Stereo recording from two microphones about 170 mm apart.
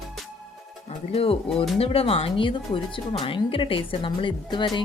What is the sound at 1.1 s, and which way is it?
Speech, 35° left (ahead or behind).